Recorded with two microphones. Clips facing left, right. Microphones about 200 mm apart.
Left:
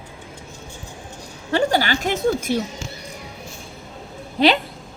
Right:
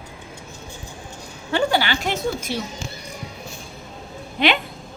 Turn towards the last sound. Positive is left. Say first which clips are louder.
# left 4 dB
turn(degrees=35)  # may be behind; listen again after turning